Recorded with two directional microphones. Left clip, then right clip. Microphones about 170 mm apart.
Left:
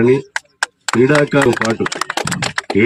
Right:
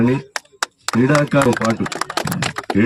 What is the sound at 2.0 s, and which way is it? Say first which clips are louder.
Typing: left 3 dB; 50° right (ahead or behind).